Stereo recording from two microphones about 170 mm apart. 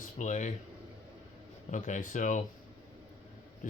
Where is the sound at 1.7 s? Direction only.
45° left (ahead or behind).